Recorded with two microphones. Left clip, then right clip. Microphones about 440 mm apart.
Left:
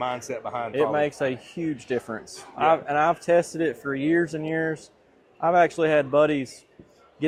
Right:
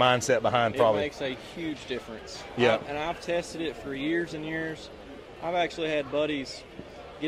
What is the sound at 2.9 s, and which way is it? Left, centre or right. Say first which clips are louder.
A man's voice: left 10 dB; left.